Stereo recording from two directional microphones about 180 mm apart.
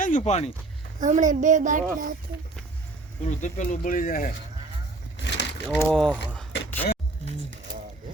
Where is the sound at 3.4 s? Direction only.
45° left (ahead or behind).